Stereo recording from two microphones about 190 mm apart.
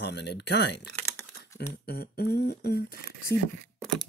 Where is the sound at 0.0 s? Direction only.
65° left (ahead or behind).